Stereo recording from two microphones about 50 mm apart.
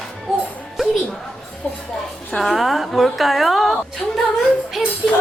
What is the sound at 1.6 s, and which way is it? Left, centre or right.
Speech, left.